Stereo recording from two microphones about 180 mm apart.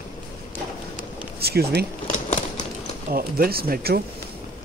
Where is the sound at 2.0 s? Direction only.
45° left (ahead or behind).